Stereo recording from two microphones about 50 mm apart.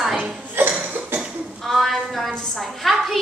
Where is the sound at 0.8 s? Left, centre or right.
Right.